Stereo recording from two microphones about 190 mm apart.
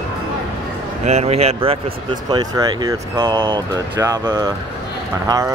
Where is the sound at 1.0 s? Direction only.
35° right (ahead or behind).